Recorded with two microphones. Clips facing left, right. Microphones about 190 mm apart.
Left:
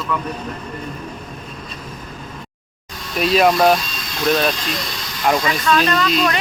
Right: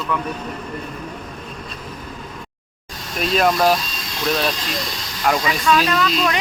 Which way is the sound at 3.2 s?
5° left (ahead or behind).